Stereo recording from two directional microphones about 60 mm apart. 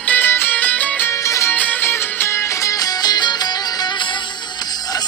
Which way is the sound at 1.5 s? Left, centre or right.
Left.